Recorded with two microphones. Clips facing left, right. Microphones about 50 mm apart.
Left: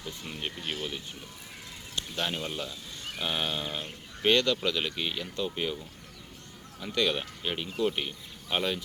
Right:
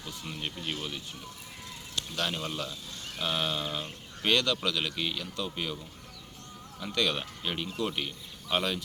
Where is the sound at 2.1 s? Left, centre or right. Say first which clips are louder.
Even; centre.